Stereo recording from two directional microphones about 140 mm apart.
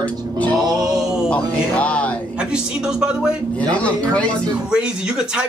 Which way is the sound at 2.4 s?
5° right (ahead or behind).